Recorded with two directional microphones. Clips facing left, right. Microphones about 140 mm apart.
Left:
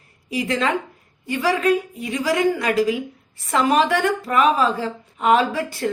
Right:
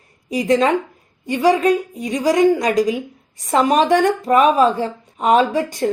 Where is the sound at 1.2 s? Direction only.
15° right (ahead or behind).